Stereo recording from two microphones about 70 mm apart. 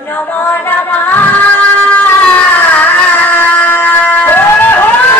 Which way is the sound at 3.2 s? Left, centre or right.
Left.